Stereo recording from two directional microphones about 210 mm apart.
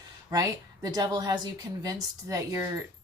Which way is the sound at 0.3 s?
15° right (ahead or behind).